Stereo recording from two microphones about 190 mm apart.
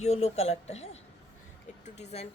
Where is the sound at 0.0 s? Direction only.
35° left (ahead or behind).